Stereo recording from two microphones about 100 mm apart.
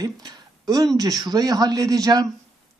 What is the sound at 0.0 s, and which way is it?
A man's voice, 40° right (ahead or behind).